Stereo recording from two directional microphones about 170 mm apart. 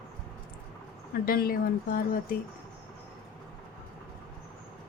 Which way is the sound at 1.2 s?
60° left (ahead or behind).